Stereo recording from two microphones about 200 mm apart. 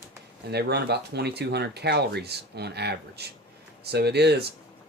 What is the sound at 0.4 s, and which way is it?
Speech, 55° right (ahead or behind).